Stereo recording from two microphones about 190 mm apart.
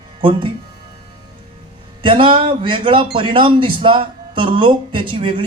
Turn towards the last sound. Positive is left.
turn(degrees=-25)  # may be behind; listen again after turning